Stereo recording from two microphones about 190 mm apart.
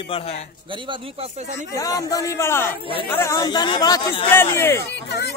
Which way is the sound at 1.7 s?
20° left (ahead or behind).